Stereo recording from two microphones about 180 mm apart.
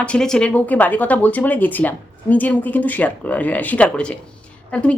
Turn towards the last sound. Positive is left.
turn(degrees=5)  # may be behind; listen again after turning